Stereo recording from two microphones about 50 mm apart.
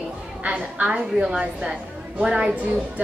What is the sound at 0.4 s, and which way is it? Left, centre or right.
Speech, right.